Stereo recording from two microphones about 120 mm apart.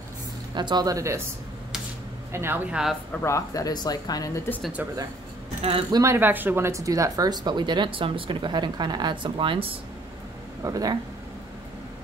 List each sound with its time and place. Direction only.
0.6 s speech: 35° right (ahead or behind)
2.3 s speech: 20° right (ahead or behind)
3.1 s speech: 20° left (ahead or behind)
5.6 s speech: 50° right (ahead or behind)
5.9 s speech: 30° right (ahead or behind)
6.1 s speech: 15° right (ahead or behind); by 9.7 s 45° right (ahead or behind)
10.6 s speech: 30° right (ahead or behind)